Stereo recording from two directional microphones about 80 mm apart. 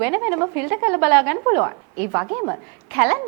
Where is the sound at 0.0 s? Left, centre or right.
Right.